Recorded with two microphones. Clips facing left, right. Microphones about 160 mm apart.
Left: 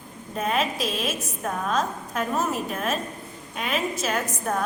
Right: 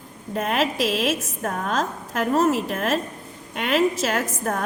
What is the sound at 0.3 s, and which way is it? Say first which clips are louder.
A woman's voice: right 3 dB; 80° right.